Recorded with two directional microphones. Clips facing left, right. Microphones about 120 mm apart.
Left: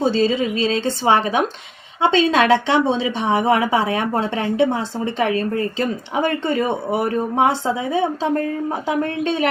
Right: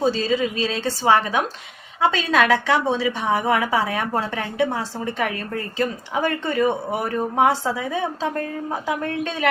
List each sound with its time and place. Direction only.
0.2 s speech: 25° left (ahead or behind)